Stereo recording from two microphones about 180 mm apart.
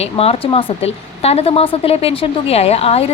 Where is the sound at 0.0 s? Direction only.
35° left (ahead or behind).